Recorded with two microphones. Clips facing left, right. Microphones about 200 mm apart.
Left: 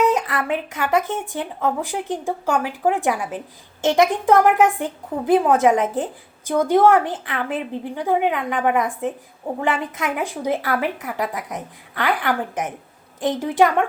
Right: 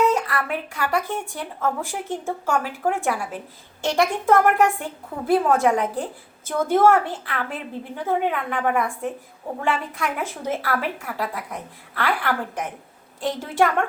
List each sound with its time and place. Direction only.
0.0 s speech: 20° left (ahead or behind)